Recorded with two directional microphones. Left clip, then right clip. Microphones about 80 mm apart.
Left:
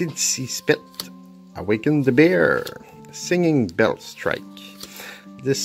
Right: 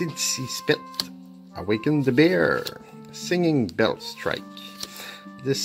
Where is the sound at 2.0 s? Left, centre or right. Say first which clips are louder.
Left 4 dB; centre.